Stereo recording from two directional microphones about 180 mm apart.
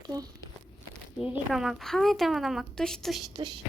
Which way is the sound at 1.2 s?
5° right (ahead or behind).